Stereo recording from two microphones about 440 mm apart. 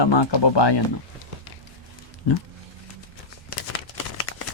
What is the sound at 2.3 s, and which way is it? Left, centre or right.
Speech, left.